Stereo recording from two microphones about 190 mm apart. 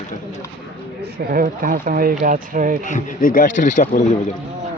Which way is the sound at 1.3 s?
50° right (ahead or behind).